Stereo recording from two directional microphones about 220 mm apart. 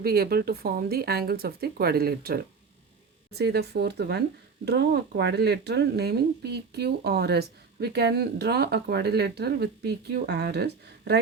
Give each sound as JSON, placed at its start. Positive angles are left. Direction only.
{"t": 0.0, "sound": "speech", "side_deg": -45}